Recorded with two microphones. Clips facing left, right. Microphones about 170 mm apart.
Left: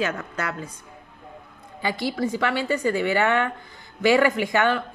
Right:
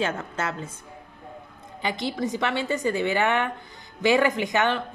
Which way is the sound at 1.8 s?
20° right (ahead or behind).